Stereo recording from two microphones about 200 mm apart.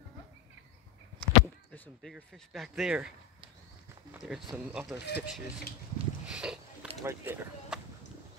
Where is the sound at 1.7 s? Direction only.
5° left (ahead or behind).